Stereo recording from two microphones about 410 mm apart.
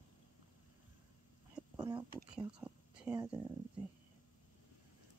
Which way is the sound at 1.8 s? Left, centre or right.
Centre.